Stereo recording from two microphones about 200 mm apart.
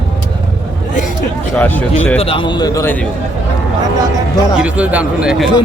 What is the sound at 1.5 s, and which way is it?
Speech, 10° left (ahead or behind).